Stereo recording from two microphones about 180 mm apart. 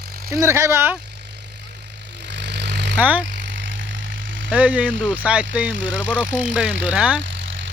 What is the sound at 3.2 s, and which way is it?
Vehicle, 90° right.